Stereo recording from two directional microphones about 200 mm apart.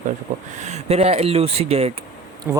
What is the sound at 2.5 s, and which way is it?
Speech, 10° right (ahead or behind).